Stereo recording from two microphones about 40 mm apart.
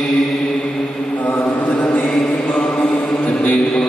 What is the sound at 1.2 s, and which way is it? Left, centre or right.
Mantra, left.